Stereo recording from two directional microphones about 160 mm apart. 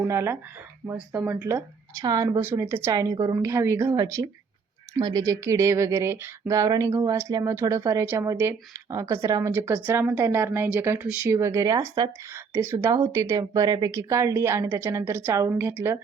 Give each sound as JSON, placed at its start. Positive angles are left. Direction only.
{"t": 0.1, "sound": "a woman's voice", "side_deg": -15}